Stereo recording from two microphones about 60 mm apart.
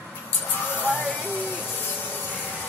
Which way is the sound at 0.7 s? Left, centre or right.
Left.